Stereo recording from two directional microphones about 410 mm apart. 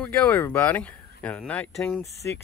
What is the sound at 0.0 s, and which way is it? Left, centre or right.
Speech, centre.